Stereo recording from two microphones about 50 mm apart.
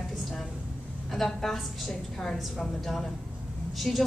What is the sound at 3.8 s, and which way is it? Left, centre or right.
Speech, centre.